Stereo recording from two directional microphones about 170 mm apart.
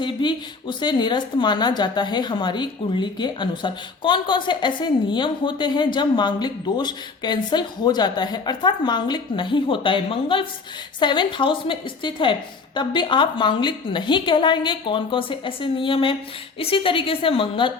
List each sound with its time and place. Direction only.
0.0 s a woman's voice: 30° left (ahead or behind)